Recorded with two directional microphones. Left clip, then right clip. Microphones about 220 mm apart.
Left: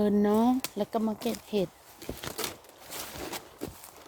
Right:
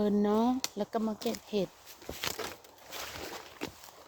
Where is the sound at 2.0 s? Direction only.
35° left (ahead or behind).